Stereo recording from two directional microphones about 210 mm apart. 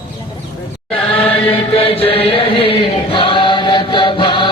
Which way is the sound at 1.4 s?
30° left (ahead or behind).